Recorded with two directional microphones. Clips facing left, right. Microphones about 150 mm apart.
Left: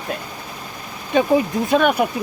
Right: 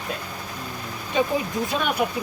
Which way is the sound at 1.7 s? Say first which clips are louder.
Left 11 dB; 60° left (ahead or behind).